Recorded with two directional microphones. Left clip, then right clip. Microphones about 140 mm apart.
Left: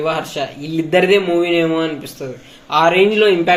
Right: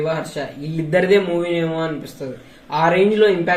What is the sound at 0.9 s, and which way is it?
A man's voice, 15° left (ahead or behind).